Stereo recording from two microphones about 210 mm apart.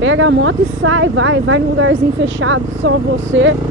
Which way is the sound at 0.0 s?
65° right (ahead or behind).